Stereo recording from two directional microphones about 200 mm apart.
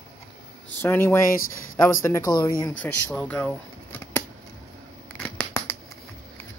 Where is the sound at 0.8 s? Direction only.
10° left (ahead or behind).